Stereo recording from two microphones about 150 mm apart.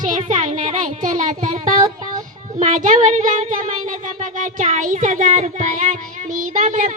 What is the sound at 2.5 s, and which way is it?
Speech, 55° right (ahead or behind).